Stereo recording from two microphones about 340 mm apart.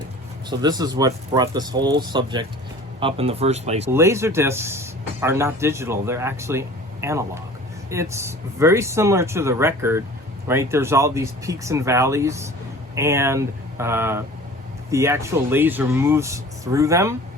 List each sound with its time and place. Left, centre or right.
0.5 s speech: centre
3.9 s speech: centre